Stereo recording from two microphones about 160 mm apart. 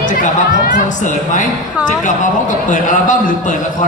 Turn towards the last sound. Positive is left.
turn(degrees=55)  # may be behind; listen again after turning